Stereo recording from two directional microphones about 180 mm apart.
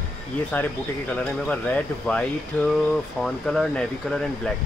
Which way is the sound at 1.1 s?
5° left (ahead or behind).